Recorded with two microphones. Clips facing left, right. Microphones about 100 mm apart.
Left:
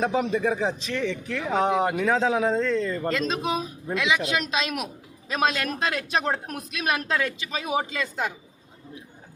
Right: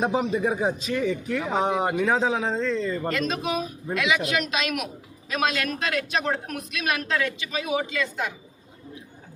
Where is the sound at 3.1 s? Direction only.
25° left (ahead or behind).